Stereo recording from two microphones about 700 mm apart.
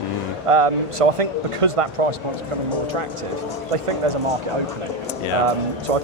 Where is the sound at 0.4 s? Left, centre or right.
Right.